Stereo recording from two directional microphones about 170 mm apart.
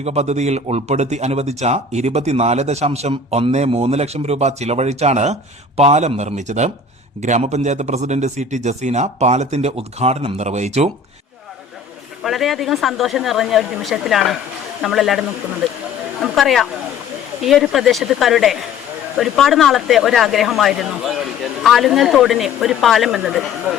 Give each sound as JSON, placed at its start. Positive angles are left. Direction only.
{"t": 0.0, "sound": "a man's voice", "side_deg": -40}
{"t": 12.2, "sound": "speech", "side_deg": 0}
{"t": 16.2, "sound": "speech", "side_deg": 0}